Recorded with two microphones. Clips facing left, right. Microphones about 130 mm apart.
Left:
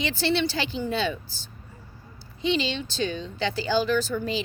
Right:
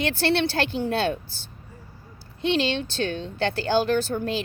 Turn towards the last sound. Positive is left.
turn(degrees=-55)  # may be behind; listen again after turning